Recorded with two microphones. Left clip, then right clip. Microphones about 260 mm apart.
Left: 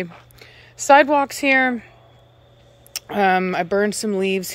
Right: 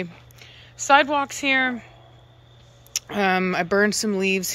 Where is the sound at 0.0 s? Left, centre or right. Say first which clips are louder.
Left 3 dB; centre.